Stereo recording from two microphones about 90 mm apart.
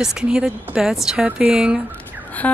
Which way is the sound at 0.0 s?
10° right (ahead or behind).